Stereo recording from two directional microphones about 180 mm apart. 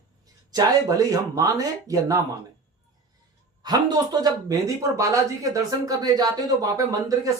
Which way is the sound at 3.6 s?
20° right (ahead or behind).